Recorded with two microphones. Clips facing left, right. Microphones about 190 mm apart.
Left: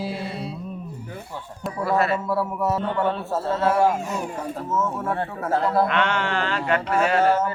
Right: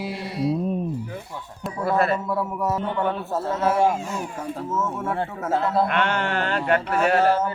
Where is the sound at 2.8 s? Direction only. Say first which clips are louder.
Left 1 dB; 15° right (ahead or behind).